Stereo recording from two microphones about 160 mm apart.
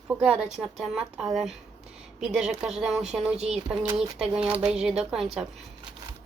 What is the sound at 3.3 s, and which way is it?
Speech, 40° right (ahead or behind).